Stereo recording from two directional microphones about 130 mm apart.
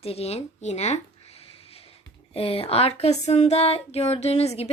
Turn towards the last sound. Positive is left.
turn(degrees=55)  # may be behind; listen again after turning